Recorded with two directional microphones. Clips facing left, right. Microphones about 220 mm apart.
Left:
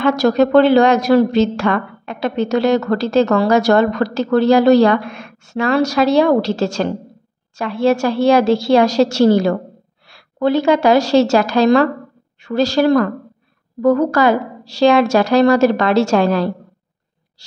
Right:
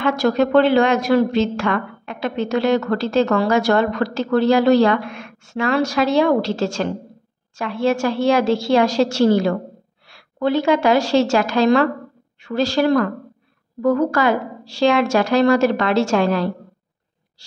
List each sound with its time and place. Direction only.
0.0 s a woman's voice: 40° left (ahead or behind)